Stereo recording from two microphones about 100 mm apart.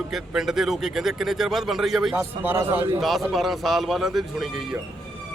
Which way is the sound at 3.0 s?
Centre (ahead or behind).